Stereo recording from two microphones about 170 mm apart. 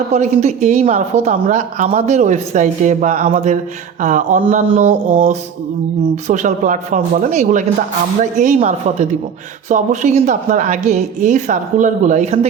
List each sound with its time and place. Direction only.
0.1 s speech: 45° right (ahead or behind)
5.0 s a sound: 55° right (ahead or behind)
6.2 s speech: 45° right (ahead or behind)